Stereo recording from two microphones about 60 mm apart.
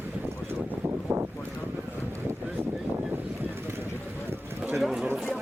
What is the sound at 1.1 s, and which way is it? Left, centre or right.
Boat, right.